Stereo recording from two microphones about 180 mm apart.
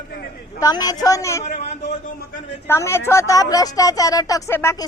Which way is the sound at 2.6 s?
15° left (ahead or behind).